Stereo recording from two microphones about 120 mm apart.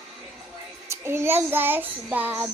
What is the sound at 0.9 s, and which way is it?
Child singing, 20° right (ahead or behind).